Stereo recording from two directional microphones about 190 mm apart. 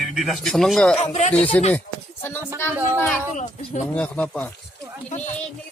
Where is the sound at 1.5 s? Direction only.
10° left (ahead or behind).